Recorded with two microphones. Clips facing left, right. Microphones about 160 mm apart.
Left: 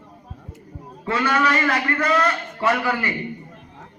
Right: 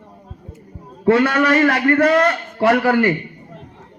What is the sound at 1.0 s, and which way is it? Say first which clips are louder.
A man's voice: right 7 dB; 65° right (ahead or behind).